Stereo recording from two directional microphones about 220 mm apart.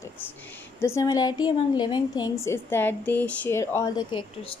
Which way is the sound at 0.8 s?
15° left (ahead or behind).